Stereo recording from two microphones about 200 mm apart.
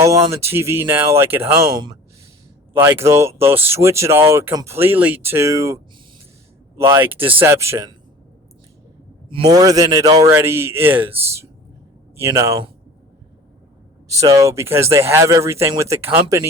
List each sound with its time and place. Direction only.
0.3 s speech: 15° right (ahead or behind)
2.7 s speech: 10° right (ahead or behind)
9.3 s a man's voice: 20° right (ahead or behind)
14.2 s speech: 15° right (ahead or behind)